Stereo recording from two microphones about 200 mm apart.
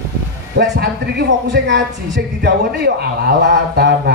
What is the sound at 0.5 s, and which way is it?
Speech, 60° right (ahead or behind).